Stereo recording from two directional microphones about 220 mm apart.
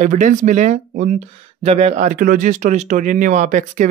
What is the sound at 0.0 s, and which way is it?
Speech, 35° right (ahead or behind).